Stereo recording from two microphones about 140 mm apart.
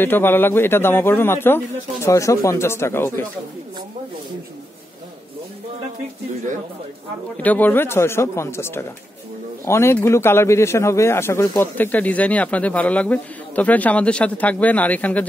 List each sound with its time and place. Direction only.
0.0 s speech: 15° left (ahead or behind)
7.4 s speech: 10° left (ahead or behind)